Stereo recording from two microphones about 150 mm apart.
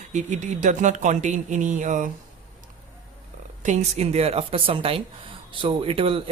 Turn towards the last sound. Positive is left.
turn(degrees=-40)  # may be behind; listen again after turning